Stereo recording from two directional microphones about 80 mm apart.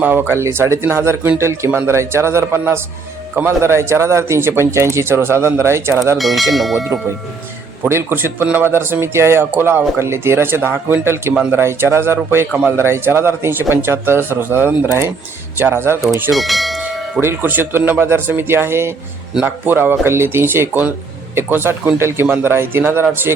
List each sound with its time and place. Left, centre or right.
0.0 s speech: right
6.1 s speech: centre
7.9 s speech: right
16.3 s church bell: centre
17.2 s speech: right